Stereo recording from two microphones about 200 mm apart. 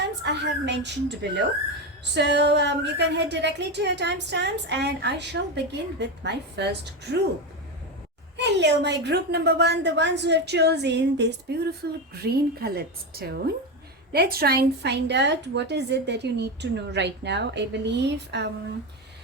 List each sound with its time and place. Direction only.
0.2 s speech: 60° right (ahead or behind)
8.4 s a woman's voice: 60° right (ahead or behind)